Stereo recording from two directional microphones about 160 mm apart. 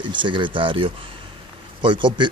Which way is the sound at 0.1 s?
30° right (ahead or behind).